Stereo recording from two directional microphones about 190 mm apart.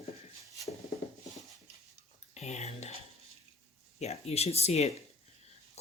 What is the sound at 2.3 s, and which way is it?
Speech, 35° left (ahead or behind).